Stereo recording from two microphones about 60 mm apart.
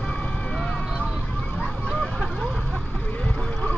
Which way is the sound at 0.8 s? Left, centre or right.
Centre.